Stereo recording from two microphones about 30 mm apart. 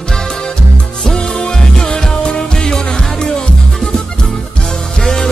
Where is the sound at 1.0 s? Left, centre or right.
Left.